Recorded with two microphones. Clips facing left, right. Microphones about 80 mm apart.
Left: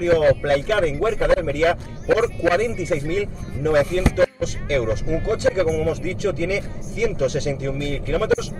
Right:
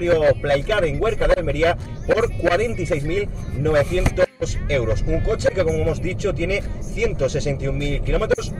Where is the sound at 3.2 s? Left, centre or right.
Centre.